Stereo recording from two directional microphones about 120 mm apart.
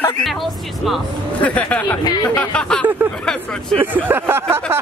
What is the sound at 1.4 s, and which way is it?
Speech, 10° left (ahead or behind).